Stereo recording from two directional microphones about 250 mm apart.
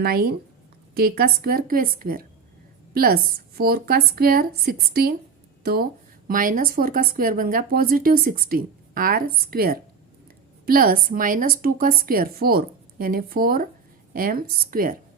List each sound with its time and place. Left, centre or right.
0.0 s a woman's voice: right